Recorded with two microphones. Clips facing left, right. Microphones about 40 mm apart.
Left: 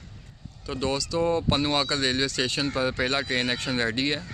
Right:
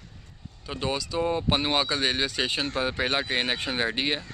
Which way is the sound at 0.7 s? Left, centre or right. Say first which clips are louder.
Left 2 dB; centre.